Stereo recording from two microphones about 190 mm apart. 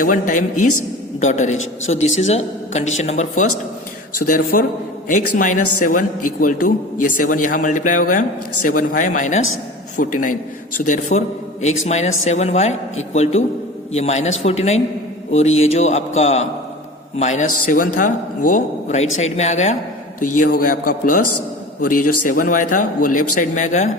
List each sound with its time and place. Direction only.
0.0 s a man's voice: 45° left (ahead or behind)
2.0 s a woman's voice: 90° left
2.2 s a man's voice: 35° left (ahead or behind)